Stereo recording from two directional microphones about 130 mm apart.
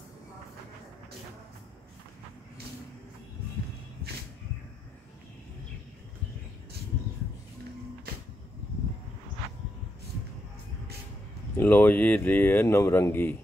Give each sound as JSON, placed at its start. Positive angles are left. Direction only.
{"t": 11.5, "sound": "speech", "side_deg": 15}